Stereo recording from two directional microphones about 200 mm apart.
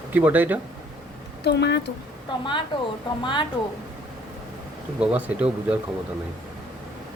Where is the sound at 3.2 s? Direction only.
25° left (ahead or behind).